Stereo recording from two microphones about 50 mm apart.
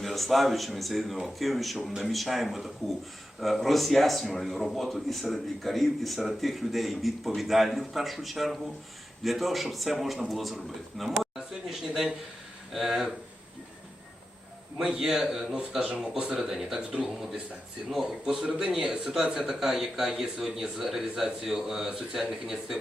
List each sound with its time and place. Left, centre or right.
0.0 s a man's voice: centre
14.8 s speech: centre
16.1 s speech: centre
16.4 s a man's voice: centre